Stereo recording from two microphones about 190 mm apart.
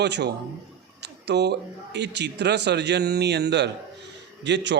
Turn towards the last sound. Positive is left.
turn(degrees=-70)  # may be behind; listen again after turning